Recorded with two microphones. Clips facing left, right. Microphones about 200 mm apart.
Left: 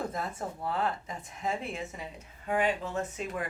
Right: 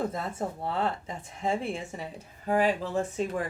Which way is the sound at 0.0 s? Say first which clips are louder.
Right 4 dB; 25° right (ahead or behind).